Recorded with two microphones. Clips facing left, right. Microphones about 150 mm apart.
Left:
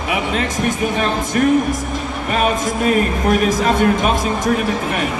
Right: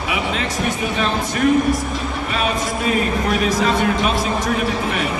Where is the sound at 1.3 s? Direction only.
45° left (ahead or behind).